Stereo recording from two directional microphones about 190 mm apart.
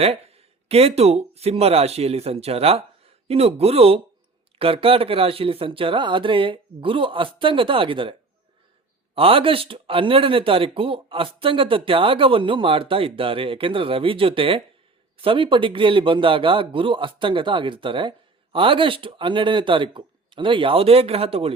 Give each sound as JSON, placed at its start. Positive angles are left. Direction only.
{"t": 0.0, "sound": "speech", "side_deg": -30}
{"t": 9.1, "sound": "speech", "side_deg": -30}